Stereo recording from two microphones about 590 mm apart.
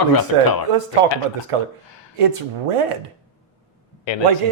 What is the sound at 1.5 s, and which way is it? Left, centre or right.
A woman's voice, right.